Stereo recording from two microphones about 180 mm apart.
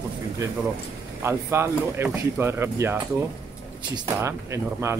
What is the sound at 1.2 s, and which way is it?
Speech, 15° right (ahead or behind).